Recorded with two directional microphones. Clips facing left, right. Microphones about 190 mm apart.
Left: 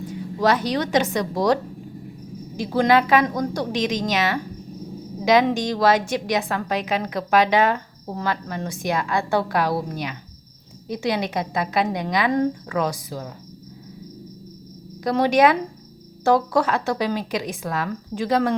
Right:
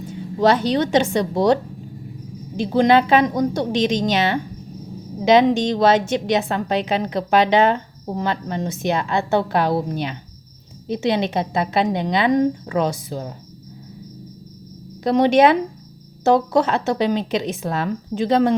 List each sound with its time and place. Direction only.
0.1 s a woman's voice: 25° right (ahead or behind)
2.6 s a woman's voice: 25° right (ahead or behind)
15.0 s a woman's voice: 25° right (ahead or behind)